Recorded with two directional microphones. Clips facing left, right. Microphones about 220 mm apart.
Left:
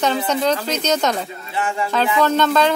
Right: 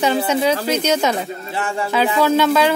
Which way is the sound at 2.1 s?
10° right (ahead or behind).